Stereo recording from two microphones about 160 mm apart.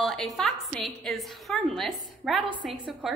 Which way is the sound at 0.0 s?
Centre (ahead or behind).